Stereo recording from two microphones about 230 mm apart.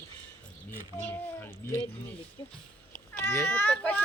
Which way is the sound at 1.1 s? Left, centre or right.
Centre.